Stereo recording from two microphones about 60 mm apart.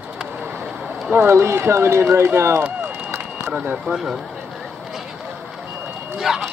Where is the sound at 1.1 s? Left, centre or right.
Right.